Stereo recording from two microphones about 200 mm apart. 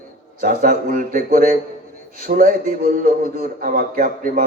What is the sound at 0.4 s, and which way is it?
Speech, 45° right (ahead or behind).